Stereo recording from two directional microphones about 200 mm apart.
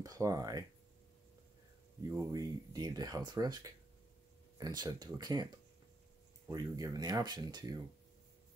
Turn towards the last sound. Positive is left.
turn(degrees=-20)  # may be behind; listen again after turning